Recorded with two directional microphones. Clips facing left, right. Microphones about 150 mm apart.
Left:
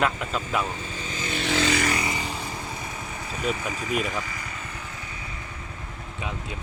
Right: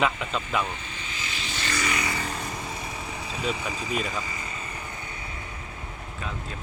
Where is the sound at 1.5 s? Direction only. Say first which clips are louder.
Left 9 dB; 85° left.